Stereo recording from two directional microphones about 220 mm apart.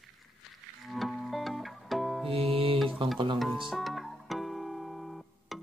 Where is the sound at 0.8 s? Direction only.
Centre (ahead or behind).